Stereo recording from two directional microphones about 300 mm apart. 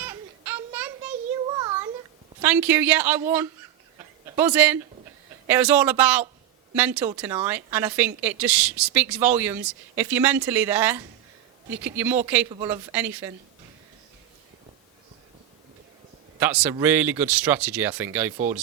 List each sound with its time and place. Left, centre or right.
0.0 s a sound: centre
2.4 s a woman's voice: centre
16.4 s a woman's voice: centre